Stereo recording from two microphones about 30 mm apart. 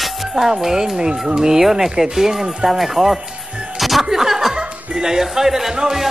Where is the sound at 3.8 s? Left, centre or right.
Centre.